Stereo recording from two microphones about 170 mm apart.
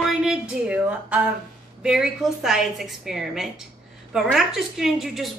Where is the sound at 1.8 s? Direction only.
5° right (ahead or behind).